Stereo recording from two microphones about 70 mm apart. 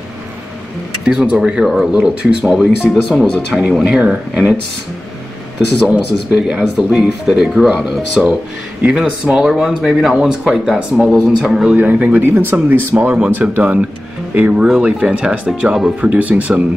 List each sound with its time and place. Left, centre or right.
1.0 s speech: centre
5.9 s speech: centre
8.1 s speech: centre
11.7 s speech: right; by 15.9 s centre
16.0 s speech: right